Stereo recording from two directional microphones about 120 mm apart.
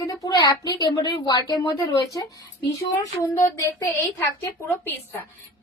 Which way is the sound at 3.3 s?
20° left (ahead or behind).